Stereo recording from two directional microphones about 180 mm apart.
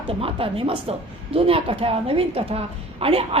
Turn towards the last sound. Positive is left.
turn(degrees=-30)  # may be behind; listen again after turning